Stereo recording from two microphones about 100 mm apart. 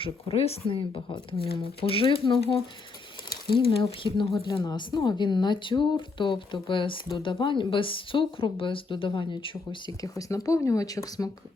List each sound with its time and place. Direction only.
0.0 s speech: 80° left
0.7 s speech: 60° left (ahead or behind)
4.6 s speech: 45° left (ahead or behind)
10.0 s speech: 35° left (ahead or behind)